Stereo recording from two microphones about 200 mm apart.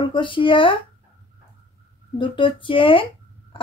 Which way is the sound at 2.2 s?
25° left (ahead or behind).